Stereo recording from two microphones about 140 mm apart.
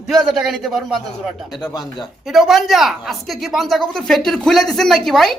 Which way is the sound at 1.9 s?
Centre (ahead or behind).